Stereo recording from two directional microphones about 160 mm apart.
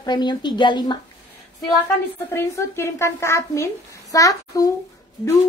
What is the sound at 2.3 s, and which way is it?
A woman's voice, 15° left (ahead or behind).